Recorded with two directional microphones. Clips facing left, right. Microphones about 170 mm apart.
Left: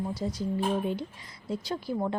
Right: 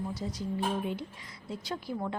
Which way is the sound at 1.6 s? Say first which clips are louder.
Left 4 dB; 30° left (ahead or behind).